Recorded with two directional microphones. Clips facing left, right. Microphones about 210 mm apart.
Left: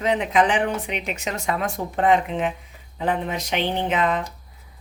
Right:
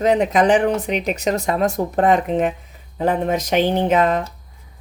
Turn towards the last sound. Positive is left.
turn(degrees=-40)  # may be behind; listen again after turning